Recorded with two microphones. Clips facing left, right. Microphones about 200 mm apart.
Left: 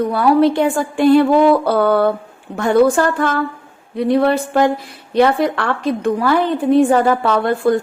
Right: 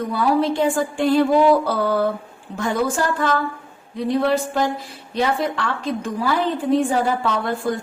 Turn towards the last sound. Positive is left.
turn(degrees=60)  # may be behind; listen again after turning